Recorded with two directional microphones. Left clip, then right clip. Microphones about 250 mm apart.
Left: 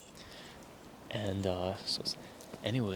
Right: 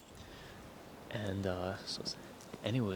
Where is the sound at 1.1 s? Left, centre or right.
Centre.